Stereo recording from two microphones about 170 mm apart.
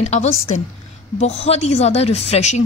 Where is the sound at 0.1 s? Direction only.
40° left (ahead or behind).